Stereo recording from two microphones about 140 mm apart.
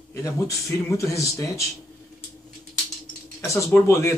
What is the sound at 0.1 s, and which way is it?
Speech, 25° left (ahead or behind).